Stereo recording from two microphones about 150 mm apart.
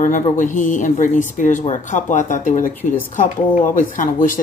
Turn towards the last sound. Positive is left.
turn(degrees=60)  # may be behind; listen again after turning